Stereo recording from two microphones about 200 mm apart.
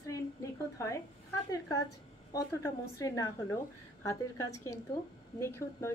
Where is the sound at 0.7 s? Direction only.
15° left (ahead or behind).